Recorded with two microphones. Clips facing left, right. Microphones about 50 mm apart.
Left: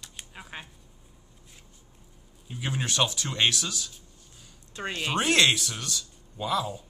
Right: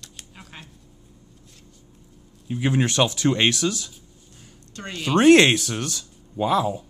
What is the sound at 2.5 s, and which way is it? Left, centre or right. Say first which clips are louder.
Speech: right 9 dB; right.